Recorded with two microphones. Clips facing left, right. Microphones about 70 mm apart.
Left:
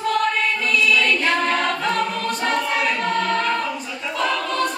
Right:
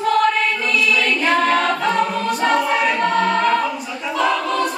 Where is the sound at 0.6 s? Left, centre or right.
Centre.